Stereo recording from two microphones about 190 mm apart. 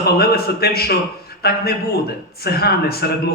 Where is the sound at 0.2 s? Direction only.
55° left (ahead or behind).